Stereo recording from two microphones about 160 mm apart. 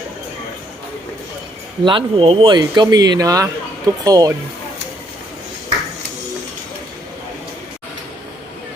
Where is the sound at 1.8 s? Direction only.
35° right (ahead or behind).